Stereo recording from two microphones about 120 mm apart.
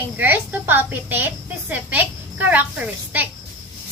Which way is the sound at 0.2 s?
15° right (ahead or behind).